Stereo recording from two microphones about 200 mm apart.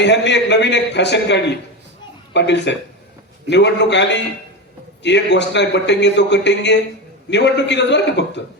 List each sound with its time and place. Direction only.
0.0 s a man's voice: 60° left (ahead or behind)